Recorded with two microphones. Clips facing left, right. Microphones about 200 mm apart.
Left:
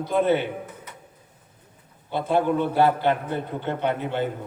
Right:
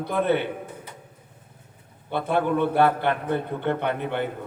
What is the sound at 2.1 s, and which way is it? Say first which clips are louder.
A man's voice: left 1 dB; 60° right (ahead or behind).